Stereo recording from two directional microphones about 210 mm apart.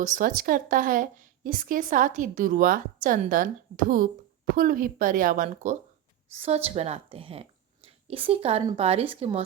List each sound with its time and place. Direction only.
0.0 s a woman's voice: 40° right (ahead or behind)
6.3 s a woman's voice: 30° right (ahead or behind)